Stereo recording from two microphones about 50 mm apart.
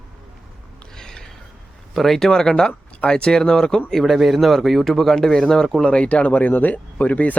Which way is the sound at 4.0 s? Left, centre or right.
Centre.